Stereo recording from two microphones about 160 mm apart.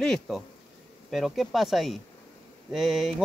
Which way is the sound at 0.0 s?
5° left (ahead or behind).